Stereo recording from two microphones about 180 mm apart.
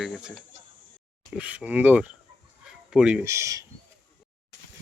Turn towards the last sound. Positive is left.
turn(degrees=-15)  # may be behind; listen again after turning